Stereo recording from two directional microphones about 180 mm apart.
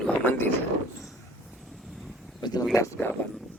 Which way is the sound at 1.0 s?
Centre (ahead or behind).